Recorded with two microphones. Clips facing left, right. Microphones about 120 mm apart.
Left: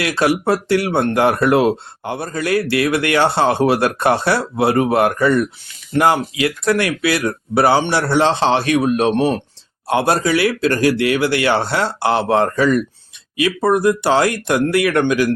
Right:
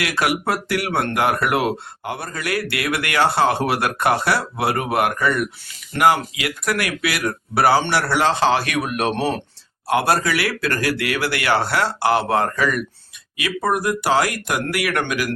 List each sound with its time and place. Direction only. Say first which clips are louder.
0.0 s speech: left 5 dB; 30° left (ahead or behind)